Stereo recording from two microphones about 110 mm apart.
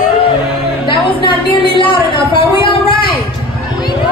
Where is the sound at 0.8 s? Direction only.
50° left (ahead or behind).